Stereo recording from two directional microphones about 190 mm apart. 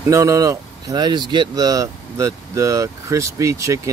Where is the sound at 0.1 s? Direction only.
15° right (ahead or behind).